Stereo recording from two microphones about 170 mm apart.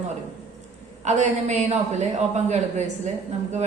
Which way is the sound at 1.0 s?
45° right (ahead or behind).